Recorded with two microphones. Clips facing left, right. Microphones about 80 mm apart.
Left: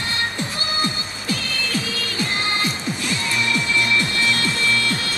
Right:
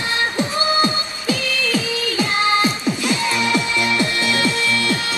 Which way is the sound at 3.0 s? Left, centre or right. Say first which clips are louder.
Right 3 dB; right.